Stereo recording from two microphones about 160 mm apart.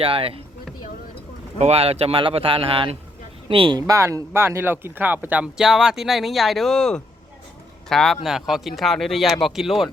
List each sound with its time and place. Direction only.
0.0 s speech: 35° right (ahead or behind)
1.5 s speech: 40° right (ahead or behind); by 9.9 s centre (ahead or behind)